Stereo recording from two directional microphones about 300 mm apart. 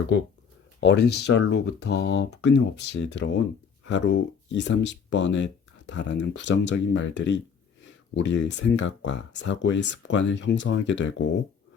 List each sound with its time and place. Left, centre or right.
0.8 s speech: left